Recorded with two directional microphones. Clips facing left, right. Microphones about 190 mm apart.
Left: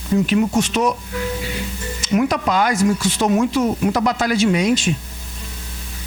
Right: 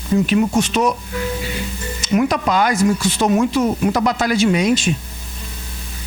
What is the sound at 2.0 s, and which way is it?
Speech, 15° right (ahead or behind).